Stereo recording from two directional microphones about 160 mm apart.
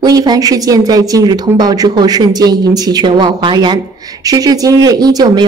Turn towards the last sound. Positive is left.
turn(degrees=-25)  # may be behind; listen again after turning